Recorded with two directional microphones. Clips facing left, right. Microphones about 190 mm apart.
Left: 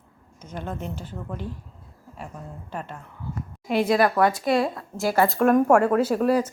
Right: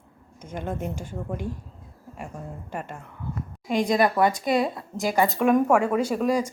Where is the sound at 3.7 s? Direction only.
5° left (ahead or behind).